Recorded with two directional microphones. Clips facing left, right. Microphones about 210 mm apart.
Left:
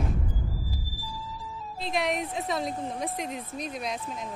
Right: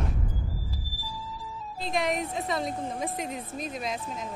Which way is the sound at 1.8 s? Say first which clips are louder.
Even; centre (ahead or behind).